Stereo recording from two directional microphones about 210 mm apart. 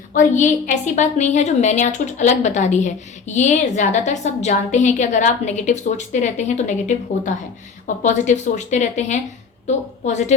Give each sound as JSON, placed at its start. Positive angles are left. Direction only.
{"t": 0.1, "sound": "a woman's voice", "side_deg": 35}